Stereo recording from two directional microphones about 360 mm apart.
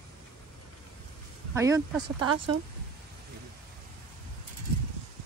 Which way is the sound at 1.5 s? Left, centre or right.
Centre.